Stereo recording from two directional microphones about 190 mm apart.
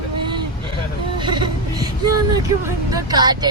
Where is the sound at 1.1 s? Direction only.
25° right (ahead or behind).